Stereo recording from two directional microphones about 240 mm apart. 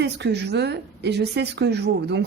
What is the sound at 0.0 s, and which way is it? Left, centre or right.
A woman's voice, right.